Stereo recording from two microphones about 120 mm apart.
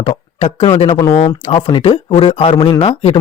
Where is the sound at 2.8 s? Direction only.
65° left (ahead or behind).